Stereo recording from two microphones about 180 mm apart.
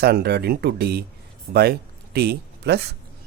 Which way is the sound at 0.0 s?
65° right (ahead or behind).